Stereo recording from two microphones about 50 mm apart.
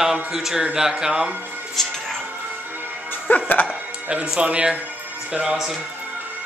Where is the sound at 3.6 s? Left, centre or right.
Centre.